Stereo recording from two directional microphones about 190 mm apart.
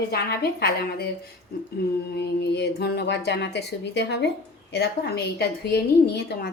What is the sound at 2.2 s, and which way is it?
A woman's voice, 65° left (ahead or behind).